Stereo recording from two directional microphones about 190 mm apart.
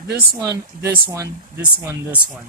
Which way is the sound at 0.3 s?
20° right (ahead or behind).